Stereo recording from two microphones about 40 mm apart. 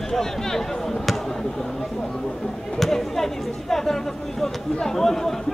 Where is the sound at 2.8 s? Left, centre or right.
Centre.